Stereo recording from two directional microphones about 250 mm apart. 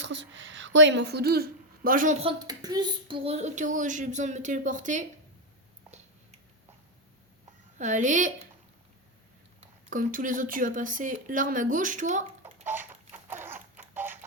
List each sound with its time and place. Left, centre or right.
0.0 s a woman's voice: right
7.8 s a woman's voice: right
9.6 s speech: right
12.6 s chicken: centre
13.2 s a sound: centre